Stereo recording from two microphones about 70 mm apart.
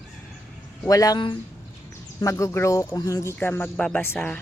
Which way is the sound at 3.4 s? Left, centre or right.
Left.